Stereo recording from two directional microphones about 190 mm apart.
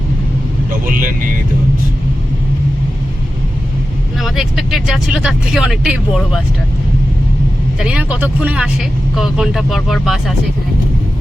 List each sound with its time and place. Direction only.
0.9 s speech: 45° right (ahead or behind)
4.2 s speech: centre (ahead or behind)
7.8 s speech: 5° right (ahead or behind)